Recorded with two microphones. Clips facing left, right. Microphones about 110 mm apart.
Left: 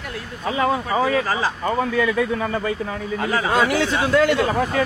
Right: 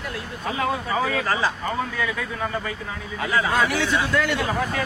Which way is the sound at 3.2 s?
35° left (ahead or behind).